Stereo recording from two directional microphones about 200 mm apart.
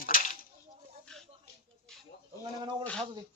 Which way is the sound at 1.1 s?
5° left (ahead or behind).